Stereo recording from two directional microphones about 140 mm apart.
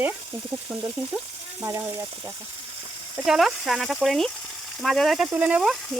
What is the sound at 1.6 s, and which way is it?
Speech, 25° right (ahead or behind).